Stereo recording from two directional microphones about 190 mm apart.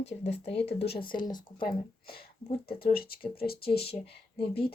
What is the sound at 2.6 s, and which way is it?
Speech, 50° left (ahead or behind).